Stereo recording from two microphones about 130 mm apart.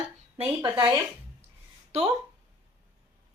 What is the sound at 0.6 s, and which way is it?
Speech, 35° right (ahead or behind).